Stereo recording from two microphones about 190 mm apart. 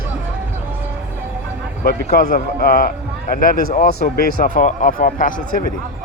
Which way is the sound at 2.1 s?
50° left (ahead or behind).